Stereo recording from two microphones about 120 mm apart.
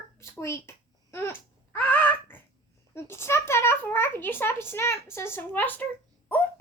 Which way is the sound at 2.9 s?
20° left (ahead or behind).